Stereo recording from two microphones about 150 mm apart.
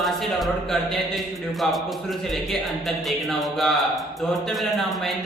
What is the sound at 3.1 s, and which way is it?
Speech, centre (ahead or behind).